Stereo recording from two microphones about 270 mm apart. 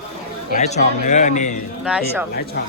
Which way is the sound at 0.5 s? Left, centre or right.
Left.